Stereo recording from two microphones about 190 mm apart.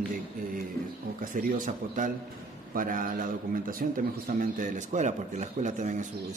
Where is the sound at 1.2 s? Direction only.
45° right (ahead or behind).